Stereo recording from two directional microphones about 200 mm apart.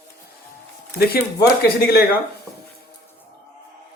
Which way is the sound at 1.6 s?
50° left (ahead or behind).